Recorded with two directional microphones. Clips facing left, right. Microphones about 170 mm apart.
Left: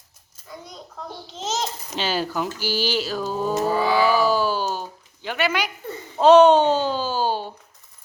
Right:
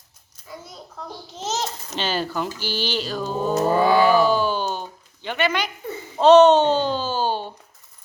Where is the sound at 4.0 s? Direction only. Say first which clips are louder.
Right 2 dB; 5° left (ahead or behind).